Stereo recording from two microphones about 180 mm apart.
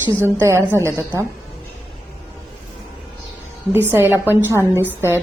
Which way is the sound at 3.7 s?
15° right (ahead or behind).